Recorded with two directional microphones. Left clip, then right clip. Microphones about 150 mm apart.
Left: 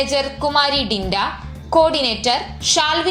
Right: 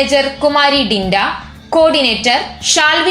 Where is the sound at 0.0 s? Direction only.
25° left (ahead or behind).